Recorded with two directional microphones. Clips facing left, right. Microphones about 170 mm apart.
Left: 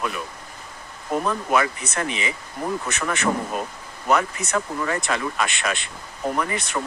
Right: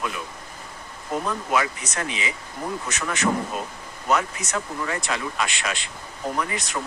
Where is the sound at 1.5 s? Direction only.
55° left (ahead or behind).